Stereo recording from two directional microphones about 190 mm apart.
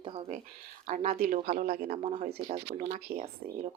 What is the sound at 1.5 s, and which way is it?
Speech, 55° right (ahead or behind).